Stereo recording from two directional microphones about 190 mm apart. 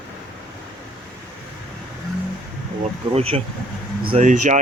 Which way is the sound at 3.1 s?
30° right (ahead or behind).